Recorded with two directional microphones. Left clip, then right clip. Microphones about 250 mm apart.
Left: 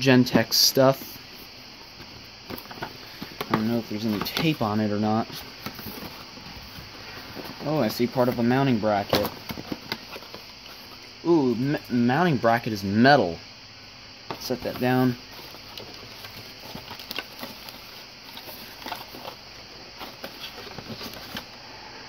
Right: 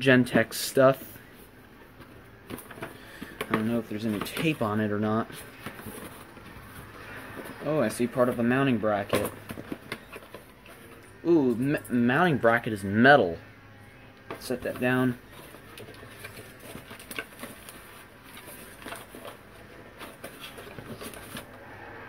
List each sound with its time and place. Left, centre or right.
0.0 s speech: left
3.3 s speech: left
7.6 s speech: left
11.2 s speech: left
14.8 s speech: left